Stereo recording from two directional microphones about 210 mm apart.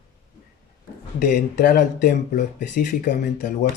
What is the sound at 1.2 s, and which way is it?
Speech, 40° left (ahead or behind).